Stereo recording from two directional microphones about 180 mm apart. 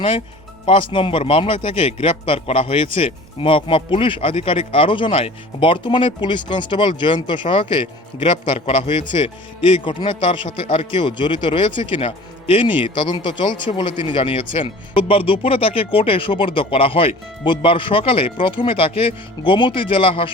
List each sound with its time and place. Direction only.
0.6 s a man's voice: 30° left (ahead or behind)